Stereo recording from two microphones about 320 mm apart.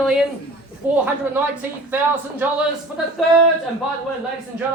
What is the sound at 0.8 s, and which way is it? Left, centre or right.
Speech, centre.